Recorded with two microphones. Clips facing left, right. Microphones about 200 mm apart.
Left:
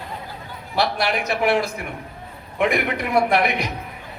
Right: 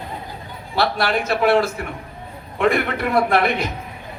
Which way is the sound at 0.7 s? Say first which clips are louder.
Right 2 dB; 15° left (ahead or behind).